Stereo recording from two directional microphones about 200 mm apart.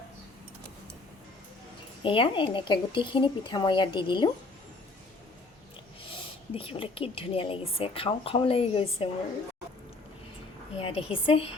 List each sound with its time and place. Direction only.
2.0 s a woman's voice: 25° left (ahead or behind)
6.5 s a woman's voice: 30° left (ahead or behind)
10.8 s a woman's voice: 25° left (ahead or behind)